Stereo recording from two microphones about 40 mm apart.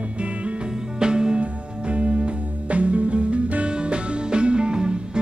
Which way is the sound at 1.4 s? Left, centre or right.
Right.